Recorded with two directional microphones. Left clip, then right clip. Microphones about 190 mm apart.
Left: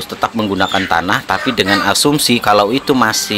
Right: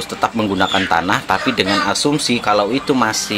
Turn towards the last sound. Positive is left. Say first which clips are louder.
# left 3 dB
turn(degrees=20)  # may be behind; listen again after turning